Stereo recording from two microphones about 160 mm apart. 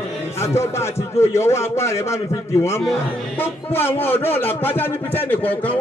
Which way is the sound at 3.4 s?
15° left (ahead or behind).